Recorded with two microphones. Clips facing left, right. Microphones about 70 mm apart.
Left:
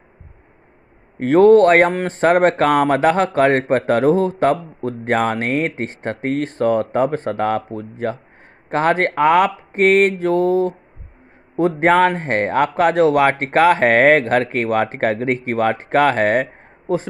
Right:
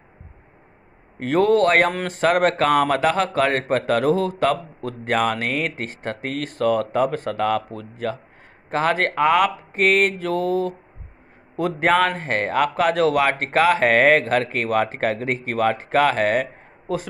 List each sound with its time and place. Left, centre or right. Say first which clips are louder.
1.2 s a man's voice: left 7 dB; left